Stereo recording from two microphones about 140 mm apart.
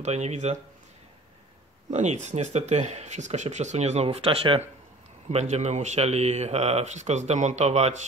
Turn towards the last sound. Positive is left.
turn(degrees=-50)  # may be behind; listen again after turning